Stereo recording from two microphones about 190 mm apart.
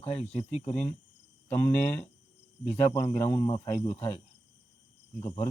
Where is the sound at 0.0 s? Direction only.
35° left (ahead or behind).